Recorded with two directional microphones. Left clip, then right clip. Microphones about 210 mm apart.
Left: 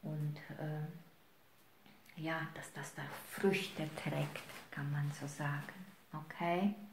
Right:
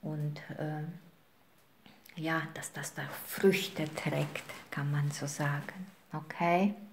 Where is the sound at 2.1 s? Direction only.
40° right (ahead or behind).